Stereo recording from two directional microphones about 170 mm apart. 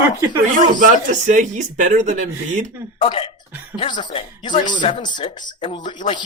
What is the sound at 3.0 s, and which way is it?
Speech, 30° left (ahead or behind).